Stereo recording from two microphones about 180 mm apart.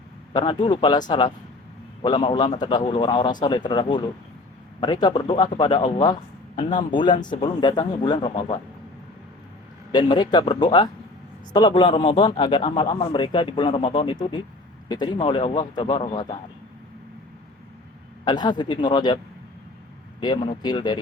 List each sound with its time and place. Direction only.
0.3 s a man's voice: 25° left (ahead or behind)
9.9 s a man's voice: 25° left (ahead or behind)
18.3 s a man's voice: 25° left (ahead or behind)